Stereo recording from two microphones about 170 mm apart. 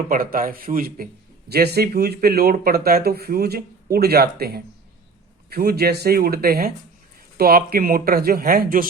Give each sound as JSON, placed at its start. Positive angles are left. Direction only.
{"t": 0.1, "sound": "speech", "side_deg": -55}
{"t": 1.5, "sound": "speech", "side_deg": -70}